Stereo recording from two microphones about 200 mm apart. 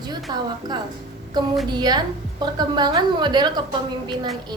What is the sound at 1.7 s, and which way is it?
A woman's voice, 20° right (ahead or behind).